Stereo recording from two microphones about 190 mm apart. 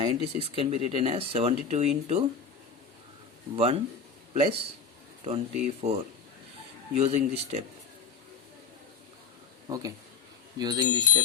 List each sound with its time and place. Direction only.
0.0 s speech: 30° right (ahead or behind)
3.5 s speech: 30° right (ahead or behind)
5.2 s speech: 35° right (ahead or behind)
9.6 s speech: 20° right (ahead or behind)